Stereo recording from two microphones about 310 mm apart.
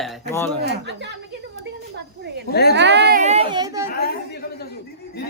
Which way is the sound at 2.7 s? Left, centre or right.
Right.